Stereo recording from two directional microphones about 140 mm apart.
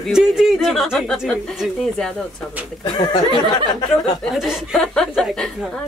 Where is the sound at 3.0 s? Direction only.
30° left (ahead or behind).